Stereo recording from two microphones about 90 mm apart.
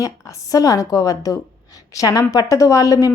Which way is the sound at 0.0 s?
35° left (ahead or behind).